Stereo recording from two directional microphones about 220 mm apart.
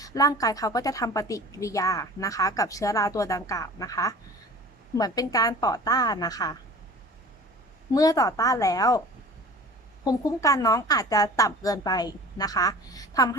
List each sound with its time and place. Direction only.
0.0 s a woman's voice: 15° left (ahead or behind)
7.9 s a woman's voice: 15° left (ahead or behind)
10.0 s a woman's voice: 15° left (ahead or behind)